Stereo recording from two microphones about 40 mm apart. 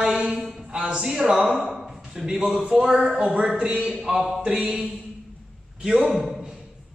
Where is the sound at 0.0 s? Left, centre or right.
Centre.